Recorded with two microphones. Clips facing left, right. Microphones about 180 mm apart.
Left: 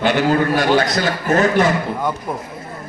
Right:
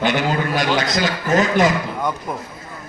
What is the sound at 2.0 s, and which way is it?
Speech, 5° left (ahead or behind).